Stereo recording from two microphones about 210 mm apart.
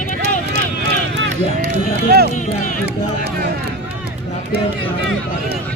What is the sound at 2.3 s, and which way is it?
Speech, 35° left (ahead or behind).